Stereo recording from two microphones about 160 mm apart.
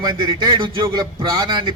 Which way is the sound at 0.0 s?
30° right (ahead or behind).